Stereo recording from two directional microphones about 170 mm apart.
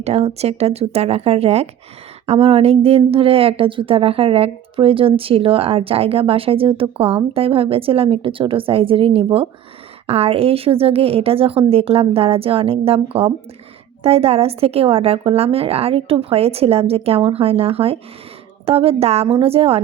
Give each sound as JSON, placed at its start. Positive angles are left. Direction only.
{"t": 0.0, "sound": "a woman's voice", "side_deg": -40}